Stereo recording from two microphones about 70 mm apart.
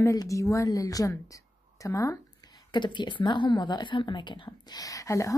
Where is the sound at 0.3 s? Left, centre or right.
Left.